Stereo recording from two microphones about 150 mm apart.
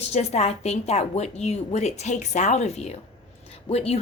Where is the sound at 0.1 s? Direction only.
45° left (ahead or behind).